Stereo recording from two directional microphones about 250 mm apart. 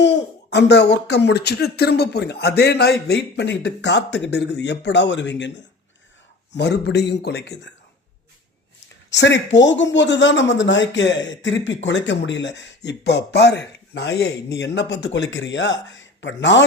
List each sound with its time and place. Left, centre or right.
0.0 s speech: left
9.0 s speech: left